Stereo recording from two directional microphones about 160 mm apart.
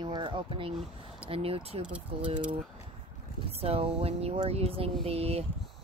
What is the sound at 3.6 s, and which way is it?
Speech, 40° right (ahead or behind).